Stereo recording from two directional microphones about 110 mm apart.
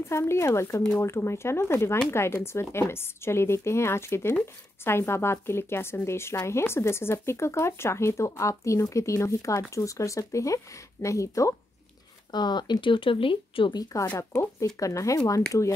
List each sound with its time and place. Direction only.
0.1 s speech: 25° left (ahead or behind)
12.3 s speech: 40° left (ahead or behind)
14.1 s speech: 25° left (ahead or behind)